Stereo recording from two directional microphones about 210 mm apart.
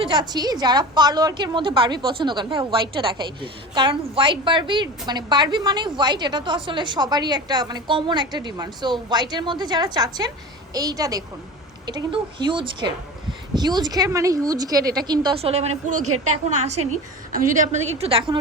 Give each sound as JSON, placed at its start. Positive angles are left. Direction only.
{"t": 0.0, "sound": "a woman's voice", "side_deg": -20}
{"t": 16.0, "sound": "a woman's voice", "side_deg": -90}
{"t": 16.6, "sound": "a woman's voice", "side_deg": -35}